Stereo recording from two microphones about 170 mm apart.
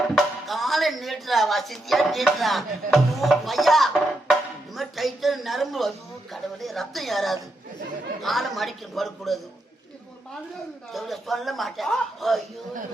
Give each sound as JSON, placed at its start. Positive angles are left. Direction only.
{"t": 0.2, "sound": "speech", "side_deg": 0}
{"t": 10.9, "sound": "speech", "side_deg": 0}